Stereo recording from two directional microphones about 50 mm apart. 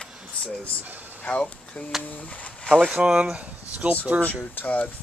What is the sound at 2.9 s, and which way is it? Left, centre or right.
Speech, centre.